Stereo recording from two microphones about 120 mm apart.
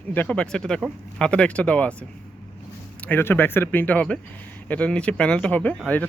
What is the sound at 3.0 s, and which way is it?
Speech, 20° left (ahead or behind).